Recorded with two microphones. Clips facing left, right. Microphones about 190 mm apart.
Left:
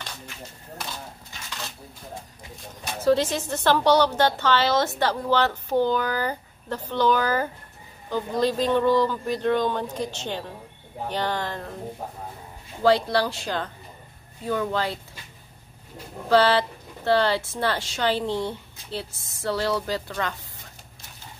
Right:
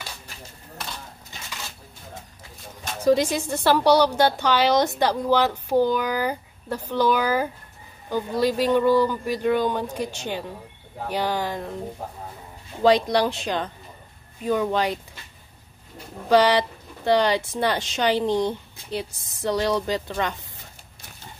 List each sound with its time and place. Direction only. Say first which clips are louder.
3.0 s a woman's voice: right 2 dB; 15° right (ahead or behind)
12.8 s a woman's voice: right 2 dB; 15° right (ahead or behind)
16.3 s a woman's voice: right 1 dB; 15° right (ahead or behind)